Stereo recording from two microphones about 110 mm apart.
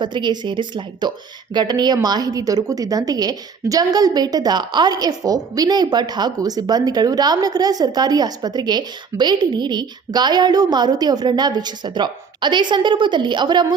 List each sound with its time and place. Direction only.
0.0 s a woman's voice: 45° right (ahead or behind)